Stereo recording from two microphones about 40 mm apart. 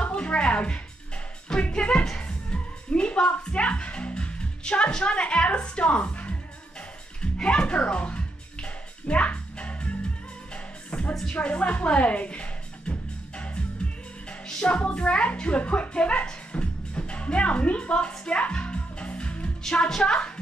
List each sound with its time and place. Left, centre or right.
0.0 s music: left
2.1 s speech: left
7.2 s music: left
11.2 s speech: left
14.6 s a woman's voice: left
19.6 s a woman's voice: centre